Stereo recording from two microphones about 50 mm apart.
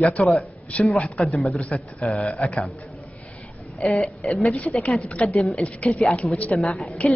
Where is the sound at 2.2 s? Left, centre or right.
Left.